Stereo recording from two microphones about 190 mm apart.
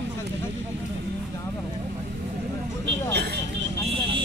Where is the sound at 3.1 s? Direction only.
60° right (ahead or behind).